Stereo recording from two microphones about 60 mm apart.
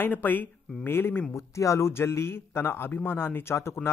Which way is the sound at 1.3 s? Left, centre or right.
Left.